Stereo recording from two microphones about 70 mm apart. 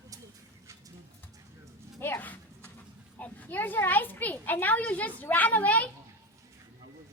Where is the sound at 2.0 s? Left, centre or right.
Left.